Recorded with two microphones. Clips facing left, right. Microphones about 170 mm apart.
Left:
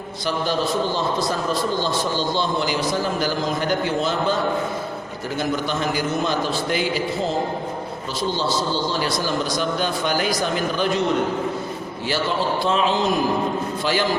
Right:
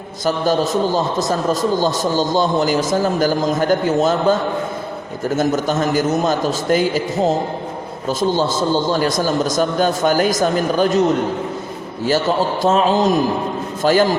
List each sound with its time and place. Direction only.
0.3 s a man's voice: 45° right (ahead or behind)
5.4 s a man's voice: 45° right (ahead or behind)
12.6 s a man's voice: 45° right (ahead or behind)